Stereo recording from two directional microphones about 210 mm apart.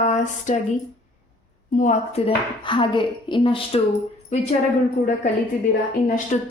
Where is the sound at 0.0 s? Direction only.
35° left (ahead or behind).